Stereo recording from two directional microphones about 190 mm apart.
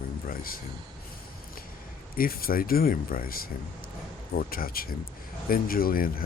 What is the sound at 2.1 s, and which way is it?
Speech, 50° left (ahead or behind).